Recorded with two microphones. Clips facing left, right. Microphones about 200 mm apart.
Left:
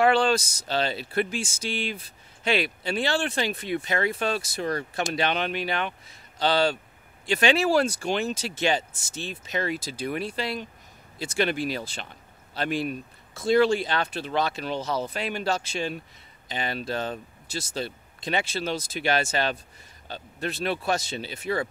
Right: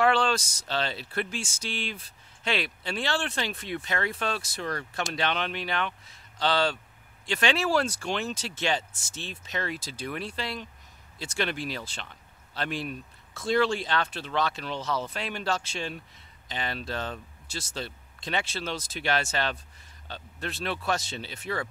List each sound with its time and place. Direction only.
0.0 s a sound: 10° left (ahead or behind)
0.7 s speech: 10° left (ahead or behind)
14.8 s speech: 40° left (ahead or behind)
15.1 s a man's voice: 10° left (ahead or behind)